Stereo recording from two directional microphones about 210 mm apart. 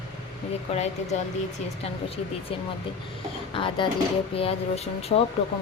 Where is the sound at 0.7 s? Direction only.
30° left (ahead or behind).